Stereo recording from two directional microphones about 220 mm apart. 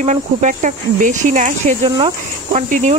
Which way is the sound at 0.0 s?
35° right (ahead or behind).